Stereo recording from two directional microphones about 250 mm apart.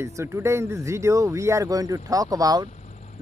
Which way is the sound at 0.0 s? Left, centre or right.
Centre.